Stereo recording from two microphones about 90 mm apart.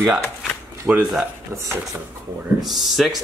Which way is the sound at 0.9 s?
15° right (ahead or behind).